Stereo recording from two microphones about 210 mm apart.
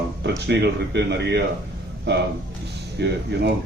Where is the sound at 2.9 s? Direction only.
50° right (ahead or behind).